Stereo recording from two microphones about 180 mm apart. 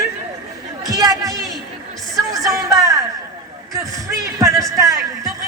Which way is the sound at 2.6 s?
15° right (ahead or behind).